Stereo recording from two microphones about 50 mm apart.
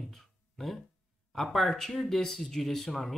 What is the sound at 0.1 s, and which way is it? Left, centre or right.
Music, centre.